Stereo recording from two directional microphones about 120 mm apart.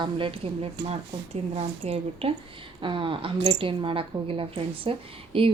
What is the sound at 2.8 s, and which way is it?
Speech, 45° right (ahead or behind).